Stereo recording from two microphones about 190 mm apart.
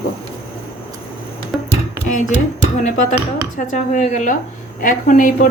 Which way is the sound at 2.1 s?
40° left (ahead or behind).